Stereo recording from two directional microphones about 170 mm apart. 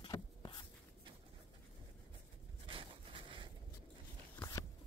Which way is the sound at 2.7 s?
30° right (ahead or behind).